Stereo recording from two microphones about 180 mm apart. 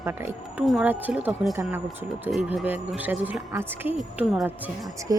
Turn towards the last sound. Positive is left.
turn(degrees=-5)  # may be behind; listen again after turning